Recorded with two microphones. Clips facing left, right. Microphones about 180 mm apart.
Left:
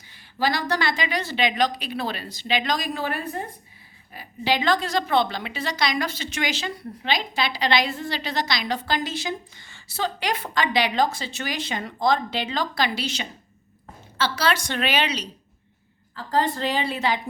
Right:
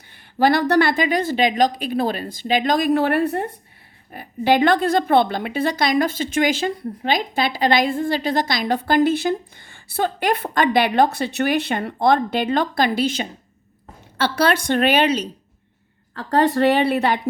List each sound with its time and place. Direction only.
0.1 s a woman's voice: 55° right (ahead or behind)
4.1 s a woman's voice: 55° right (ahead or behind)
16.1 s a woman's voice: 65° right (ahead or behind)